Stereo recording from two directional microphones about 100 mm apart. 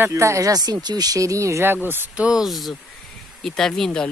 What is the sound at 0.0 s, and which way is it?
Speech, 30° right (ahead or behind).